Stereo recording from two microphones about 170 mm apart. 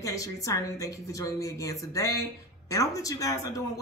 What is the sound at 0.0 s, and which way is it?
A woman's voice, 20° left (ahead or behind).